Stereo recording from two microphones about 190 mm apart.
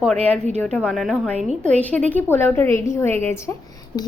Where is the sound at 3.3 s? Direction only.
15° left (ahead or behind).